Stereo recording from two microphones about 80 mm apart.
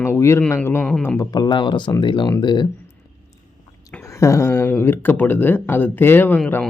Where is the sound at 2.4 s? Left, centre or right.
Left.